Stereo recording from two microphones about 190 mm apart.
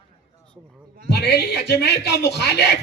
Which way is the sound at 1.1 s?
60° left (ahead or behind).